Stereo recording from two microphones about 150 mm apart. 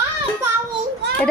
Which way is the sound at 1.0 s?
90° right.